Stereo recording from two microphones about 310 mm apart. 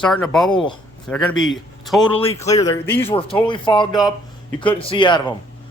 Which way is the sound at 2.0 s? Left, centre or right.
Centre.